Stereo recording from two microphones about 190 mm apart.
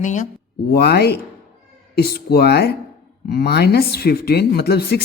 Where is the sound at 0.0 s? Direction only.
40° left (ahead or behind).